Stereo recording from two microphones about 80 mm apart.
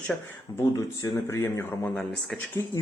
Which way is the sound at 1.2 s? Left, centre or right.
Left.